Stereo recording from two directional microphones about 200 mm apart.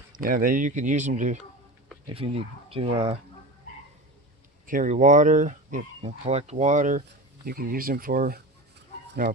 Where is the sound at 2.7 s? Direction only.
30° right (ahead or behind).